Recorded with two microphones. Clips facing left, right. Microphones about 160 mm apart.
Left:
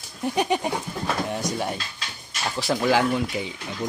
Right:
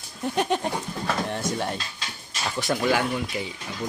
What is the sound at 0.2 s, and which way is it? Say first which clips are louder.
Goat: left 1 dB; 5° left (ahead or behind).